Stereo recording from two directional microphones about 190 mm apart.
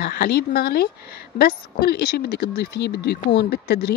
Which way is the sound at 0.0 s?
55° left (ahead or behind).